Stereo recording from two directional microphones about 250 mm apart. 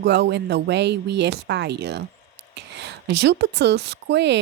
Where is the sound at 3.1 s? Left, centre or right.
Right.